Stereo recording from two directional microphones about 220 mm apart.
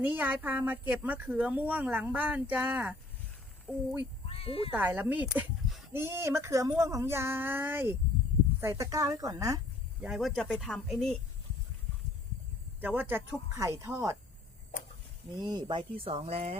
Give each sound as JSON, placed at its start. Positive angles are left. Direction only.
{"t": 0.0, "sound": "speech", "side_deg": -10}
{"t": 4.3, "sound": "speech", "side_deg": 25}
{"t": 4.7, "sound": "speech", "side_deg": -5}
{"t": 10.0, "sound": "speech", "side_deg": 0}
{"t": 12.8, "sound": "speech", "side_deg": -10}
{"t": 15.4, "sound": "speech", "side_deg": -20}